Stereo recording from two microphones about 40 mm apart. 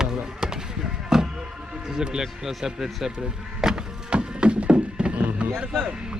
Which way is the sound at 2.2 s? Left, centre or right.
Centre.